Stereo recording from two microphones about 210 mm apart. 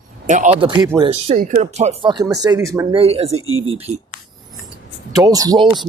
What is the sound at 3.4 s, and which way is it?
Speech, 75° right (ahead or behind).